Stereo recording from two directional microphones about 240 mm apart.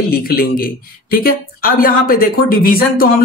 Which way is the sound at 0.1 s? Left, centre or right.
Left.